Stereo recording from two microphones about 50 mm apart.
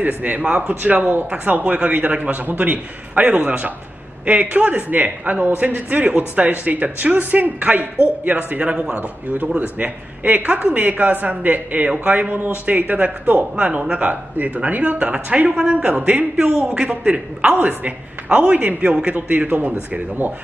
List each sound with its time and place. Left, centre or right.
0.0 s a man's voice: right
8.7 s a man's voice: centre
16.0 s a man's voice: right
16.3 s a man's voice: centre
16.9 s a man's voice: right
19.1 s a man's voice: right